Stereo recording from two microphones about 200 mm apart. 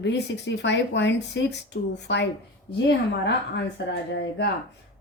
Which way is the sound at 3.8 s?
55° left (ahead or behind).